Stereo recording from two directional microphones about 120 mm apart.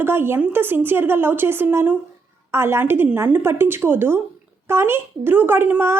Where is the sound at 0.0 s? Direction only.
20° right (ahead or behind).